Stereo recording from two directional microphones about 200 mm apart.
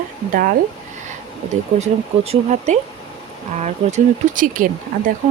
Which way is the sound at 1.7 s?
35° right (ahead or behind).